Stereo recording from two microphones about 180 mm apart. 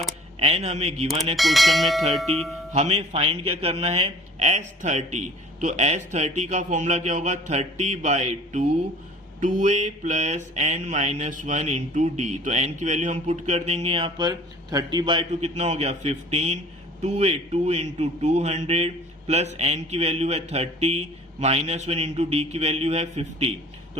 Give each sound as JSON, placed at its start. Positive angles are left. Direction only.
{"t": 0.3, "sound": "mantra", "side_deg": -35}
{"t": 1.4, "sound": "speech", "side_deg": 0}
{"t": 2.7, "sound": "mantra", "side_deg": -35}